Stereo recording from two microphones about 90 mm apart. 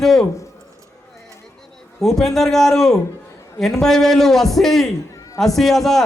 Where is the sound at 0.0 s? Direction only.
5° left (ahead or behind).